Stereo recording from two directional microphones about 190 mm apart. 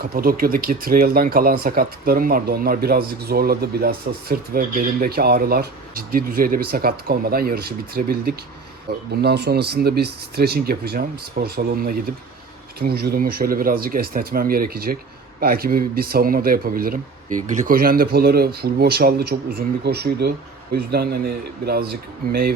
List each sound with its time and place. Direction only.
0.1 s speech: 50° right (ahead or behind)